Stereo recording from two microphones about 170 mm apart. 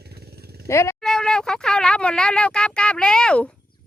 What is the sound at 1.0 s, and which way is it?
Speech, 5° left (ahead or behind).